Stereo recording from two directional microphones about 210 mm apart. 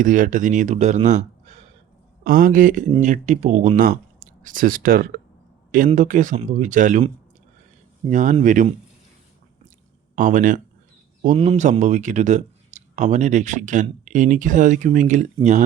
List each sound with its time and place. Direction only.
0.0 s speech: 40° right (ahead or behind)
8.0 s speech: 35° right (ahead or behind)
10.2 s speech: 40° right (ahead or behind)